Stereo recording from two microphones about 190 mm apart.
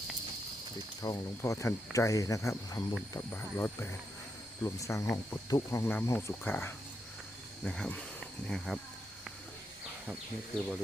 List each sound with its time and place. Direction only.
1.0 s speech: 20° left (ahead or behind); by 8.8 s centre (ahead or behind)
10.1 s speech: centre (ahead or behind)